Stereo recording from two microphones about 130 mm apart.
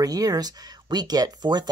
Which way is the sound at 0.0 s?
30° right (ahead or behind).